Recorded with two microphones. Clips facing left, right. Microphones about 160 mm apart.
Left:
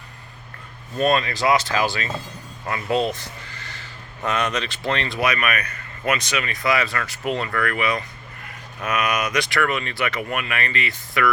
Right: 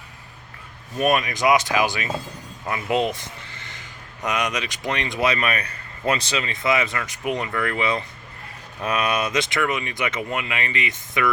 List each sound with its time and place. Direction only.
0.9 s speech: 15° right (ahead or behind)
3.4 s crow: 20° right (ahead or behind)
4.3 s speech: 15° right (ahead or behind)